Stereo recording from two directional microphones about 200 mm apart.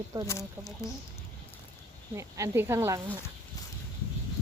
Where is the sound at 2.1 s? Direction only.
15° right (ahead or behind).